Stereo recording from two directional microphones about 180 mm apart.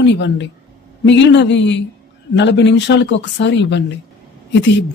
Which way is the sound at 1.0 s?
85° left.